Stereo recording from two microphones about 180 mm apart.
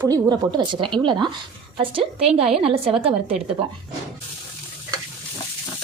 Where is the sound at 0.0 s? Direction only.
20° right (ahead or behind).